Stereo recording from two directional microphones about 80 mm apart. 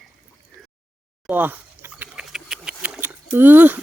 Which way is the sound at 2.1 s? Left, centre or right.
Centre.